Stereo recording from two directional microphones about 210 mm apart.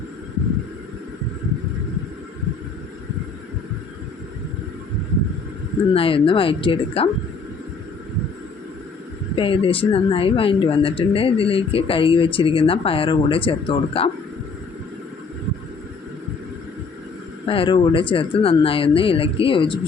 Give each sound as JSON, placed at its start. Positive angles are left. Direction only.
{"t": 5.9, "sound": "speech", "side_deg": 25}
{"t": 9.3, "sound": "speech", "side_deg": 25}
{"t": 17.4, "sound": "speech", "side_deg": 25}